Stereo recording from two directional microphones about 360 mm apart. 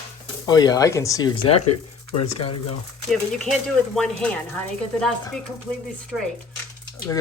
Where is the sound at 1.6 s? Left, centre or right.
Left.